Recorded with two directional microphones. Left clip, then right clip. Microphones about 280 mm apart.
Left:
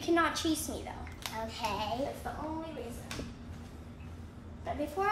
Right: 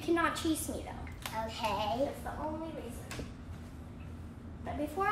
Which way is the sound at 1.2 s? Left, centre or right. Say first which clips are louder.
Right 1 dB; centre.